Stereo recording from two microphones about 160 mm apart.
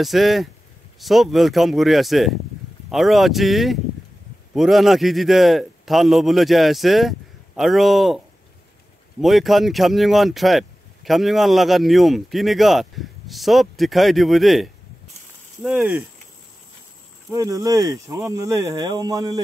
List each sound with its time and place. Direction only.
0.0 s a man's voice: centre (ahead or behind)
9.2 s a man's voice: centre (ahead or behind)
17.3 s speech: 20° right (ahead or behind)